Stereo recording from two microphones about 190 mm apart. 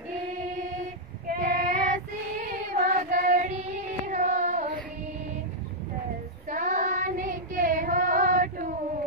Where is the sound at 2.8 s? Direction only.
40° right (ahead or behind).